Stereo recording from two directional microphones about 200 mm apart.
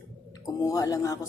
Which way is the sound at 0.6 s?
15° left (ahead or behind).